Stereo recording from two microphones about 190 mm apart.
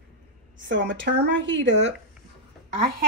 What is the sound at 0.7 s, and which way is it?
Speech, 75° right (ahead or behind).